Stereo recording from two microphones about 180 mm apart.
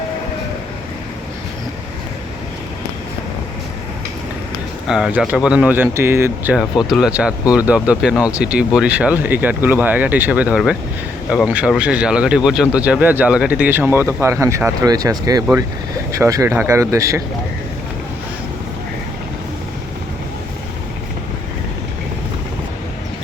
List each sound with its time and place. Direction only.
4.9 s speech: 5° right (ahead or behind)